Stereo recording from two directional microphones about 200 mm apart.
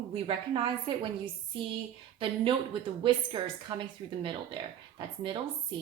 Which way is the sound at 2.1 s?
25° right (ahead or behind).